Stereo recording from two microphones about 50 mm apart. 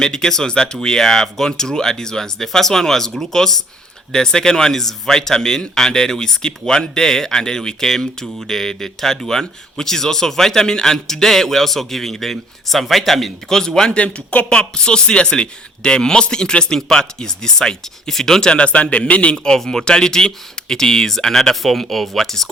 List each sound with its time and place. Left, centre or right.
0.0 s speech: centre
13.9 s speech: left
19.5 s speech: centre